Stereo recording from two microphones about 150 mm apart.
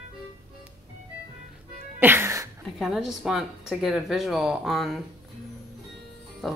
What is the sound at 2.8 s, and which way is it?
Speech, centre (ahead or behind).